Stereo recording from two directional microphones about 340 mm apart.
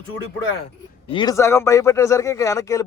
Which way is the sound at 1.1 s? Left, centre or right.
Centre.